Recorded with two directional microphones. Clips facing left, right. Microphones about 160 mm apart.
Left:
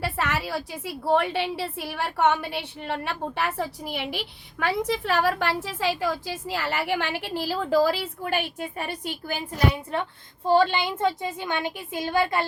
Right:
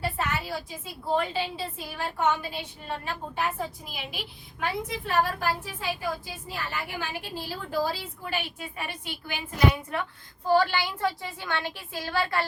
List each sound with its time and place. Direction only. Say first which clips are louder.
0.0 s a woman's voice: left 3 dB; 75° left (ahead or behind)
4.6 s a woman's voice: left 6 dB; 80° left
8.2 s a woman's voice: left 6 dB; 50° left (ahead or behind)
9.9 s a woman's voice: left 3 dB; 25° left (ahead or behind)